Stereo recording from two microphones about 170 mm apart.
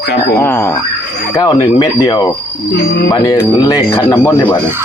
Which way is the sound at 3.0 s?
20° left (ahead or behind).